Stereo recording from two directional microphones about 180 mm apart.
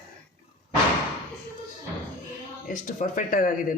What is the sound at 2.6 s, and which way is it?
Speech, 45° left (ahead or behind).